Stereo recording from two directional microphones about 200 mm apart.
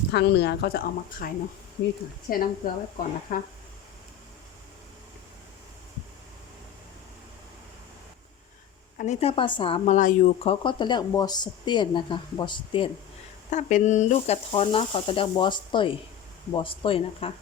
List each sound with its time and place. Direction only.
0.1 s speech: 60° left (ahead or behind)
2.3 s speech: 45° left (ahead or behind)
9.0 s speech: 30° left (ahead or behind)
13.5 s speech: 40° left (ahead or behind)